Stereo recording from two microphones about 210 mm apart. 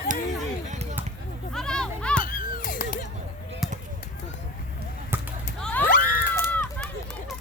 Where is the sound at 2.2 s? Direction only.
40° left (ahead or behind).